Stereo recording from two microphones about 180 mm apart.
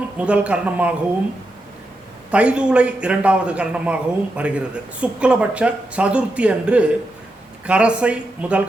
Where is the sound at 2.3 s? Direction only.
5° right (ahead or behind).